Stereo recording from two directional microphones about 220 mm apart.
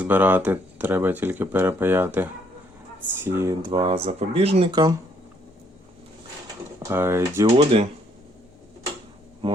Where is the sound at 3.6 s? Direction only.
20° right (ahead or behind).